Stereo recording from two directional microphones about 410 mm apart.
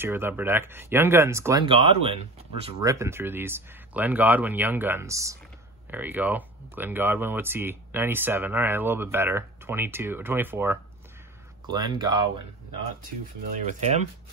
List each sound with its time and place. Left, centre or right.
0.0 s speech: centre
13.7 s speech: centre